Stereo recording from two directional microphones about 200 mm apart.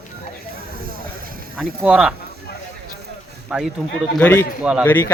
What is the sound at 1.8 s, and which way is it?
Speech, 5° right (ahead or behind).